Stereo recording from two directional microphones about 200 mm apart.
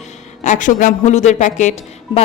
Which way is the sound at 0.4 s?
40° left (ahead or behind).